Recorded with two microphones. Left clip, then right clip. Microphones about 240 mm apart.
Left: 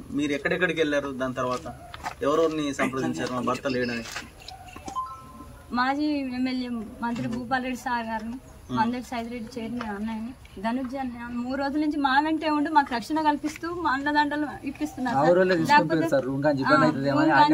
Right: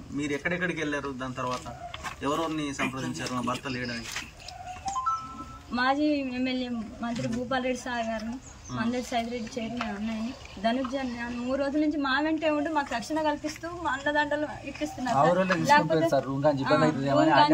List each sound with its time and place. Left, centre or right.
0.2 s a man's voice: left
5.8 s speech: centre
10.6 s a woman's voice: centre
15.1 s speech: centre